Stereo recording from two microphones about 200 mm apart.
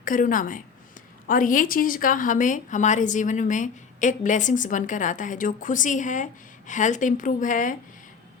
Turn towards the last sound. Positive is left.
turn(degrees=40)  # may be behind; listen again after turning